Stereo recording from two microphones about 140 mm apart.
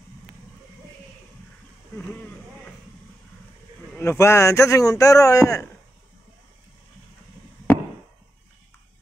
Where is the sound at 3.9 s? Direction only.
15° left (ahead or behind).